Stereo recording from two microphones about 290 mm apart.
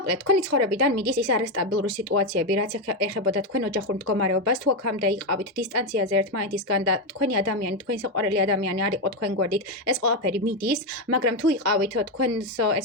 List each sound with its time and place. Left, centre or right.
0.0 s speech: right